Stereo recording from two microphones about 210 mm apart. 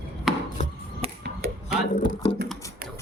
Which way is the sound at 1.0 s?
30° right (ahead or behind).